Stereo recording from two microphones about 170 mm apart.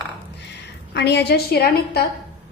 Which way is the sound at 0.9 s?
85° left.